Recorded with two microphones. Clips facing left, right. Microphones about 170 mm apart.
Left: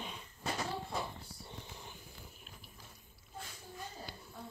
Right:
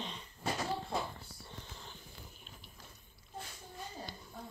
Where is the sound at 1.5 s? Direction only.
15° left (ahead or behind).